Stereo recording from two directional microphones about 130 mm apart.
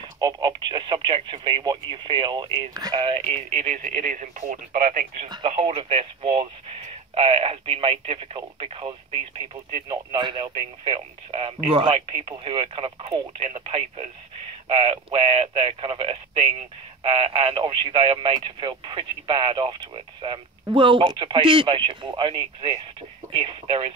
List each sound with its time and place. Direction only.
0.2 s speech: 35° right (ahead or behind)
3.5 s speech: 70° right (ahead or behind)
5.5 s speech: 55° right (ahead or behind)